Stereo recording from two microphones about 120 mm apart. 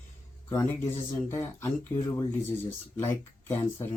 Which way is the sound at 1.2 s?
20° left (ahead or behind).